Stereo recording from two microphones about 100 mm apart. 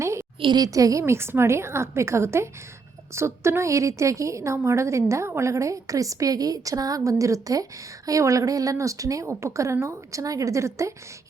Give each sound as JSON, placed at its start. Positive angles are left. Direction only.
{"t": 0.0, "sound": "a sound", "side_deg": -30}
{"t": 0.3, "sound": "a woman's voice", "side_deg": -55}
{"t": 0.6, "sound": "a woman's voice", "side_deg": -35}